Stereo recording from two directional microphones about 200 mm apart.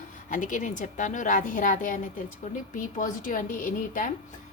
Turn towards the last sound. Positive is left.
turn(degrees=40)  # may be behind; listen again after turning